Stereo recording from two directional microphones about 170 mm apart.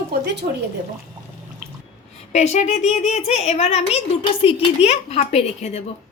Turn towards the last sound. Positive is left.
turn(degrees=40)  # may be behind; listen again after turning